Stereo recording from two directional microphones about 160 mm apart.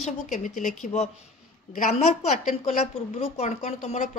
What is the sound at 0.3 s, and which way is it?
A woman's voice, 50° left (ahead or behind).